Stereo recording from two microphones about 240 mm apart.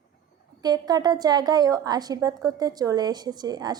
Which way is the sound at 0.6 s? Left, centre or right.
Centre.